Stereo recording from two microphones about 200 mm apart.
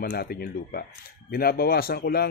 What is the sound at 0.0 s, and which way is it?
A man's voice, 50° left (ahead or behind).